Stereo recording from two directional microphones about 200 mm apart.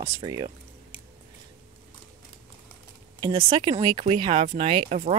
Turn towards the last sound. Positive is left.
turn(degrees=-35)  # may be behind; listen again after turning